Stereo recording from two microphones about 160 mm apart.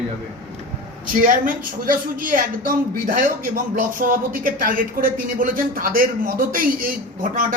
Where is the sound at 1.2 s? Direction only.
55° right (ahead or behind).